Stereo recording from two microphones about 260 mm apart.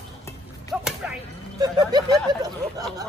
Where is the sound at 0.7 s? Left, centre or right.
Centre.